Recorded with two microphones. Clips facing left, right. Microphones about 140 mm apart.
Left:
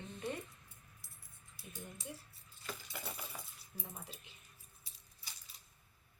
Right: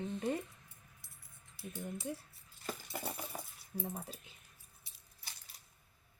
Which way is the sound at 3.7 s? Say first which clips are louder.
Right 9 dB; 35° right (ahead or behind).